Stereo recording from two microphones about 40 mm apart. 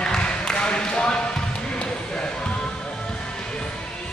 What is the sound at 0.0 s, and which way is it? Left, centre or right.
Basketball bounce, left.